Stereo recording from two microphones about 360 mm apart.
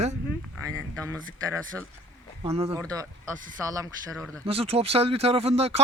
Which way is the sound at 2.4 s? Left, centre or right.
Centre.